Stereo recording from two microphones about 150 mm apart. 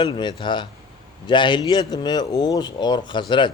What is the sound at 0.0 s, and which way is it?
Speech, 30° left (ahead or behind).